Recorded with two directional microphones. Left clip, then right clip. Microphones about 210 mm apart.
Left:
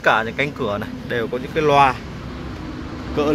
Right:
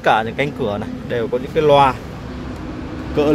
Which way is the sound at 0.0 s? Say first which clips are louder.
Right 2 dB; 10° right (ahead or behind).